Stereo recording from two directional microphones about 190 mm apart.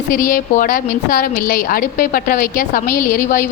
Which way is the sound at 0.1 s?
45° left (ahead or behind).